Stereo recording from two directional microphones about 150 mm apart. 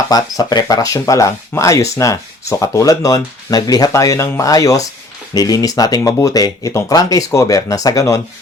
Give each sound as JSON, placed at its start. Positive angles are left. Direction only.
{"t": 0.1, "sound": "speech", "side_deg": 25}